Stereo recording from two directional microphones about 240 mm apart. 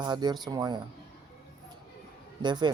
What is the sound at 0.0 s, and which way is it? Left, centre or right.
Speech, centre.